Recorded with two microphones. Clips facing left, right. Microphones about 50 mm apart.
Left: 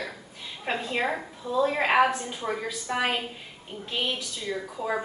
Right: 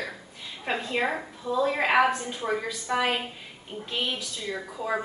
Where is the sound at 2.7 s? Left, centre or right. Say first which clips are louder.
Even; centre.